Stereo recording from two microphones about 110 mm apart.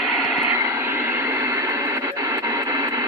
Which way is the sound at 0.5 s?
25° right (ahead or behind).